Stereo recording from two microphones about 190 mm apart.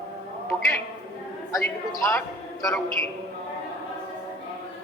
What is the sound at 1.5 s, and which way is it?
Speech, 15° left (ahead or behind).